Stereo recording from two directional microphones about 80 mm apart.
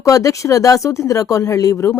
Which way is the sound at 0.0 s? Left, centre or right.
Left.